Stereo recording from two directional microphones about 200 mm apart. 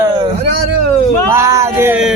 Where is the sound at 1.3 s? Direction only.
15° right (ahead or behind).